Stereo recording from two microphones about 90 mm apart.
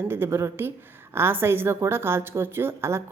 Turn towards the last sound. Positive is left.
turn(degrees=-30)  # may be behind; listen again after turning